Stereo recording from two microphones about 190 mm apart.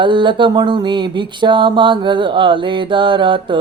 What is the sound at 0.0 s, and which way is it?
Speech, 25° right (ahead or behind).